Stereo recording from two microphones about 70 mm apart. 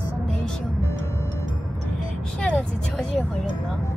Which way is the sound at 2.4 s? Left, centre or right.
Centre.